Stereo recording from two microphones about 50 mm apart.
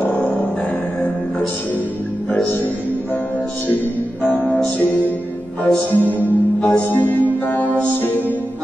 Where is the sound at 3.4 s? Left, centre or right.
Centre.